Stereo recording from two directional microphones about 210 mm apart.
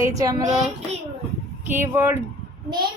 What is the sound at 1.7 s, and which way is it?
Speech, 10° right (ahead or behind).